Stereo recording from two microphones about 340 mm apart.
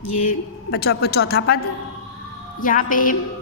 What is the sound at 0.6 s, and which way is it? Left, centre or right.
Speech, left.